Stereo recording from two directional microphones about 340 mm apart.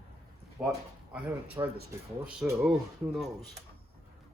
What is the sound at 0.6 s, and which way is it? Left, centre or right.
Speech, centre.